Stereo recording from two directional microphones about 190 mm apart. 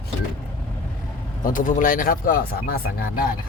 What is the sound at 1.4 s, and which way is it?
Speech, 45° left (ahead or behind).